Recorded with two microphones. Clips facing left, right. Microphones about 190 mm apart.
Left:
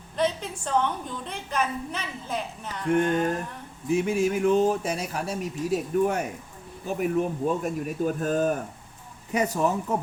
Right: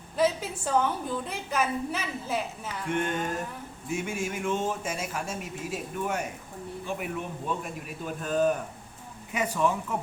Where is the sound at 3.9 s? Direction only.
35° left (ahead or behind).